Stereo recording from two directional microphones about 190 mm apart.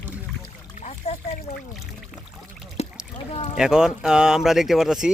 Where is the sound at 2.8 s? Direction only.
35° left (ahead or behind).